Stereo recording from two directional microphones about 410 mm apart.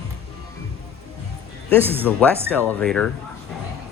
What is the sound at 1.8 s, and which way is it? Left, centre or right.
Speech, centre.